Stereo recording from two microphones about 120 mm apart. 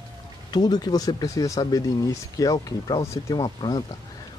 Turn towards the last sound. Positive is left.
turn(degrees=35)  # may be behind; listen again after turning